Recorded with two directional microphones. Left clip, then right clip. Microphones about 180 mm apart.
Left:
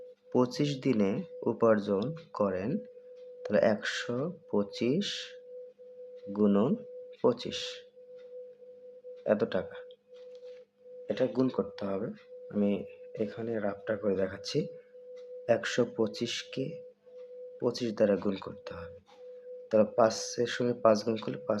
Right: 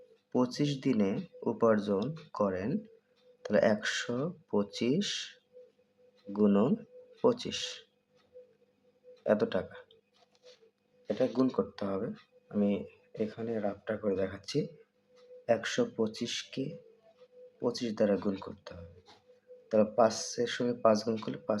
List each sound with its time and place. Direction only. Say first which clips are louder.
0.3 s speech: left 2 dB; 15° left (ahead or behind)
6.3 s speech: even; 5° left (ahead or behind)
9.2 s speech: even; 5° left (ahead or behind)
11.0 s speech: left 1 dB; 10° left (ahead or behind)